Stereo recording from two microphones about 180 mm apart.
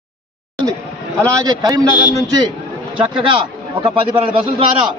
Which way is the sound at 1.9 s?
25° left (ahead or behind).